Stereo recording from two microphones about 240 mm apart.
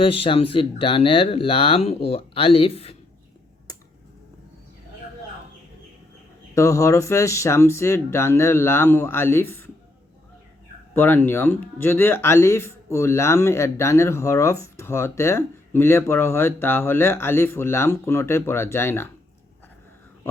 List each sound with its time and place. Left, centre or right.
0.0 s speech: left
6.5 s speech: centre
10.9 s speech: centre